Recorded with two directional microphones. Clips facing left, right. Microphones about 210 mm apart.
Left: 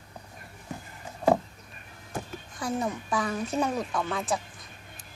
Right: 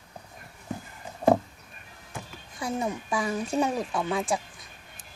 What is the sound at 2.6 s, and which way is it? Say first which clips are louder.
Speech: even; 10° right (ahead or behind).